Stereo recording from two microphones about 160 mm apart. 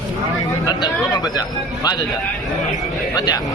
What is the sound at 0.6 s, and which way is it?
A man's voice, 25° left (ahead or behind).